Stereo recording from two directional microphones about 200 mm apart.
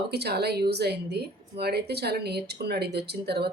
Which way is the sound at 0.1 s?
55° right (ahead or behind).